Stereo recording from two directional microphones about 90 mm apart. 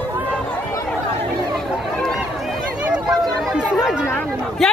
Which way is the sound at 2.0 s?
5° left (ahead or behind).